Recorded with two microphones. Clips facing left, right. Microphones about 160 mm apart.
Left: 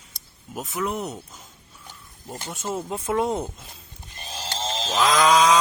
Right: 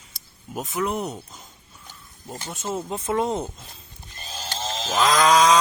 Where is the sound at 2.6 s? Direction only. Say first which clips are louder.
Even; 5° right (ahead or behind).